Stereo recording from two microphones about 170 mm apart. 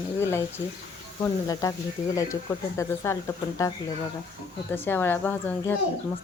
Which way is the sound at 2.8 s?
15° left (ahead or behind).